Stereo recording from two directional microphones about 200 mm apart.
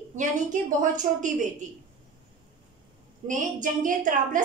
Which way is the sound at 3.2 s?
40° right (ahead or behind).